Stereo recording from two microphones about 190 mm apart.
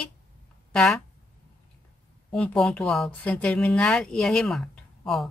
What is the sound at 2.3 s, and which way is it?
A woman's voice, 5° left (ahead or behind).